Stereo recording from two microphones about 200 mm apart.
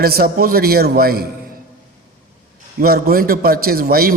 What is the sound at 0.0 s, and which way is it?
A man's voice, 50° right (ahead or behind).